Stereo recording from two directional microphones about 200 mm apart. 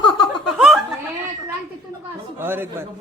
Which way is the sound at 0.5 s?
Centre (ahead or behind).